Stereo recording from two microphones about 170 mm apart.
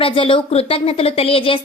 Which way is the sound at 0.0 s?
30° left (ahead or behind).